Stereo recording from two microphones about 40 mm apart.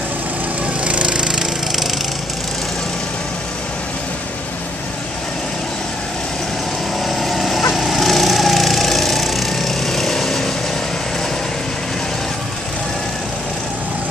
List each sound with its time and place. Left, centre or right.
0.8 s wood: right
7.1 s lawn mower: centre